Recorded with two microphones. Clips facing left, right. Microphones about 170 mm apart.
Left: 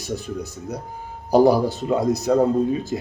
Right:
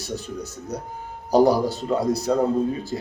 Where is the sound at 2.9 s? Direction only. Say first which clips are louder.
Left 2 dB; 15° left (ahead or behind).